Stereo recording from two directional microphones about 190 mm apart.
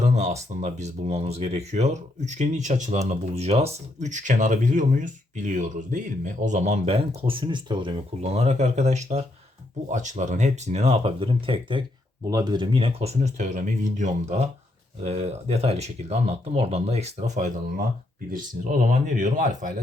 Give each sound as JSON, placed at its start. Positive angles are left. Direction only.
{"t": 0.0, "sound": "speech", "side_deg": -35}